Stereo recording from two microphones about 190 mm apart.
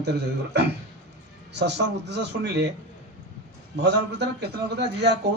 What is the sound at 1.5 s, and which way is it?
A man's voice, 65° right (ahead or behind).